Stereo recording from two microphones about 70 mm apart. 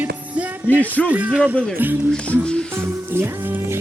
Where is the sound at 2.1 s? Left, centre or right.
Centre.